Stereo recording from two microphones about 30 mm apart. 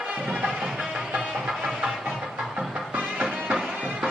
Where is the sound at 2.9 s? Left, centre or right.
Right.